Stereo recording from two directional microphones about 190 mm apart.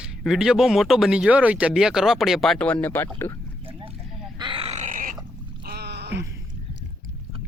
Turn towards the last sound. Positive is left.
turn(degrees=-60)  # may be behind; listen again after turning